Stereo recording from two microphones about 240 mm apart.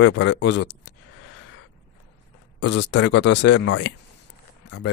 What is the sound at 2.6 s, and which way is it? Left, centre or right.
Speech, left.